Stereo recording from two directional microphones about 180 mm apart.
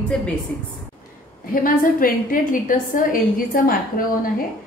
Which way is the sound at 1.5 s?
50° left (ahead or behind).